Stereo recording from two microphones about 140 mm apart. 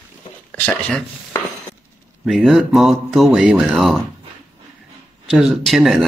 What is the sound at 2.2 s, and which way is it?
Speech, centre (ahead or behind).